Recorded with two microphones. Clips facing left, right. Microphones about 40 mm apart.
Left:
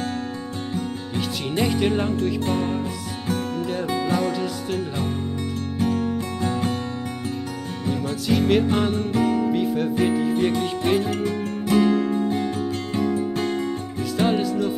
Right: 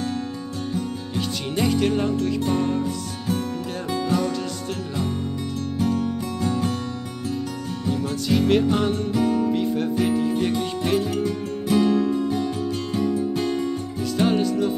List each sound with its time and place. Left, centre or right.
1.1 s music: centre
4.3 s speech: centre
5.8 s music: left
8.1 s music: centre
9.1 s music: left
9.5 s music: centre
9.9 s speech: centre
10.8 s music: left
11.8 s music: left
12.3 s music: left
14.1 s music: centre